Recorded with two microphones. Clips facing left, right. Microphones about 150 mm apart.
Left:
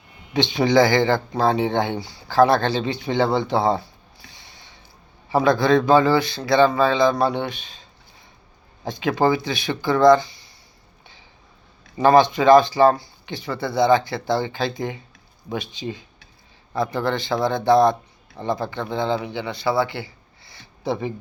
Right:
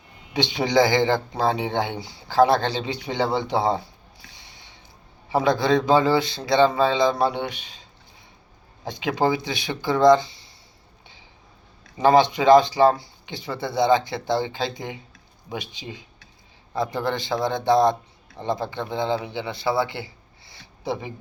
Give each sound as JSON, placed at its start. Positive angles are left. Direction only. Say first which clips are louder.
{"t": 0.3, "sound": "speech", "louder": "left 3 dB", "side_deg": -15}
{"t": 5.3, "sound": "speech", "louder": "left 3 dB", "side_deg": -20}
{"t": 8.9, "sound": "speech", "louder": "left 3 dB", "side_deg": -15}
{"t": 11.9, "sound": "speech", "louder": "left 2 dB", "side_deg": -15}